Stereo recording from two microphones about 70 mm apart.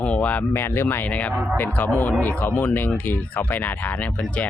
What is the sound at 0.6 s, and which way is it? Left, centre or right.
Speech, left.